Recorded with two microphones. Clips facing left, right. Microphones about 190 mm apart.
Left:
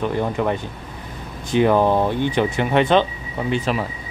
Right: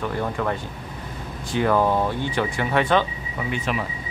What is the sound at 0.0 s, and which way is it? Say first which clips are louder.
Speech: left 4 dB; 20° left (ahead or behind).